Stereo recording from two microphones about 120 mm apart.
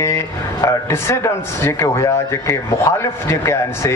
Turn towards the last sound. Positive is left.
turn(degrees=25)  # may be behind; listen again after turning